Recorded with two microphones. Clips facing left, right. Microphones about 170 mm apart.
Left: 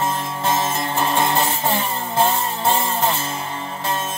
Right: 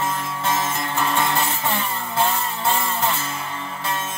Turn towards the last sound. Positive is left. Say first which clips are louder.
# left 3 dB
turn(degrees=30)  # may be behind; listen again after turning